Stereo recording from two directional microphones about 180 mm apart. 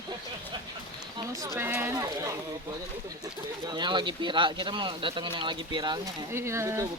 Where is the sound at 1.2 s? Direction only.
20° right (ahead or behind).